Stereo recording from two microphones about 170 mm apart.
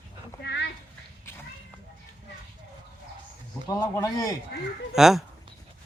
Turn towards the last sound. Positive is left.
turn(degrees=-5)  # may be behind; listen again after turning